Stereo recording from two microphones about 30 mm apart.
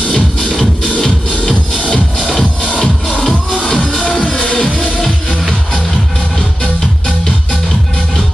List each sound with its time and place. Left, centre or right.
0.6 s music: centre